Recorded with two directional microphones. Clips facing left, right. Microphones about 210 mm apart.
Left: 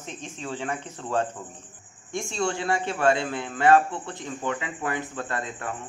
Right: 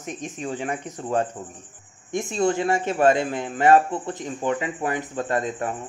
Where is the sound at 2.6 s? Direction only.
40° right (ahead or behind).